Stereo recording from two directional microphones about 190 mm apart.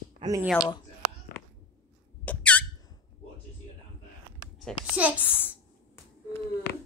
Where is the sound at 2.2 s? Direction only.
5° left (ahead or behind).